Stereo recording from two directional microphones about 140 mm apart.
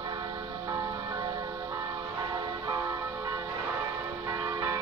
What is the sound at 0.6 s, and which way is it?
Church bell, 25° right (ahead or behind).